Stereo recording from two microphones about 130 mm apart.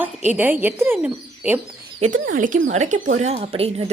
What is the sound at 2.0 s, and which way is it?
Speech, 90° right.